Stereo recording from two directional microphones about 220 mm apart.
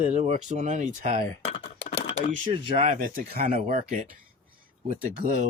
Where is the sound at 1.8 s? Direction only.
30° left (ahead or behind).